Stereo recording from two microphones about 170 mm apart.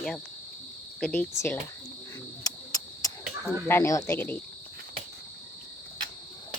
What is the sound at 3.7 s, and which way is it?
Speech, 15° left (ahead or behind).